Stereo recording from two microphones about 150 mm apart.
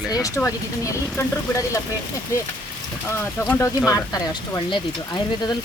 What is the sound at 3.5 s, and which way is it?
Speech, 15° left (ahead or behind).